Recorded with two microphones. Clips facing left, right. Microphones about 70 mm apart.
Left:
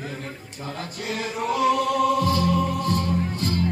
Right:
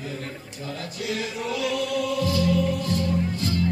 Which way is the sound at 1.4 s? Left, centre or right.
Left.